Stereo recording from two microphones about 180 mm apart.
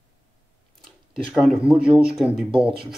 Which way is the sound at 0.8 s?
Centre (ahead or behind).